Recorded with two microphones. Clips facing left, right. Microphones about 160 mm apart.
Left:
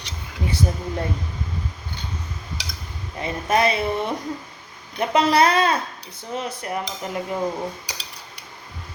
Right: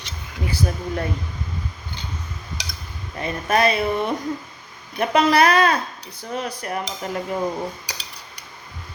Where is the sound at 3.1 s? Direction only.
20° left (ahead or behind).